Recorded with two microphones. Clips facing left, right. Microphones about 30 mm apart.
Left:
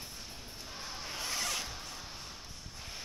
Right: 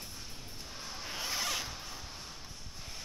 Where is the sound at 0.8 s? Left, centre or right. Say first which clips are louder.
Right 1 dB; centre.